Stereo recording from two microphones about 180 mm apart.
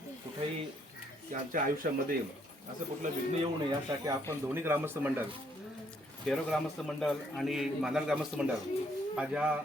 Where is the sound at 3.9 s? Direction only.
20° right (ahead or behind).